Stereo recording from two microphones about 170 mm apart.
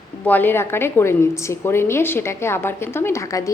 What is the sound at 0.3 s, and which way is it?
A woman's voice, 10° left (ahead or behind).